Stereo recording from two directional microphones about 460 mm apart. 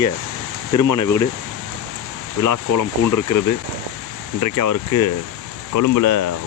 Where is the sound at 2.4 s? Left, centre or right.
Left.